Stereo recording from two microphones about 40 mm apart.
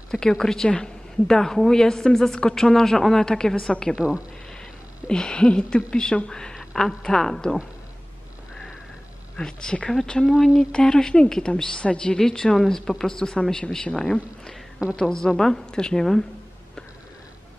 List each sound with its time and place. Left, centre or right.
0.1 s a woman's voice: centre
4.0 s speech: right
4.6 s a woman's voice: centre
9.4 s a woman's voice: centre
10.4 s speech: centre
10.7 s a woman's voice: centre
15.0 s a woman's voice: centre